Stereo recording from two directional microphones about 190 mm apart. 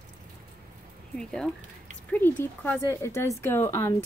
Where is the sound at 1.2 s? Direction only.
5° left (ahead or behind).